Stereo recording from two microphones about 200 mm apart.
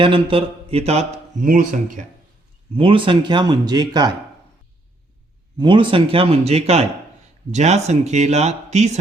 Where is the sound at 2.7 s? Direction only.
25° right (ahead or behind).